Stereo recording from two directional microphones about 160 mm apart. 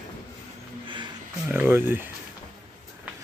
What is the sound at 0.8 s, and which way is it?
Music, 30° right (ahead or behind).